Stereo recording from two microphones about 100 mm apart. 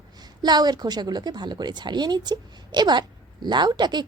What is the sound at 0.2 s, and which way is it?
Speech, 45° right (ahead or behind).